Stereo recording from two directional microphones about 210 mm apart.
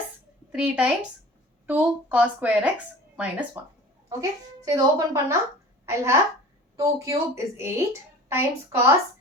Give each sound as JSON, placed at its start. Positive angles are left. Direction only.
{"t": 0.5, "sound": "a woman's voice", "side_deg": -5}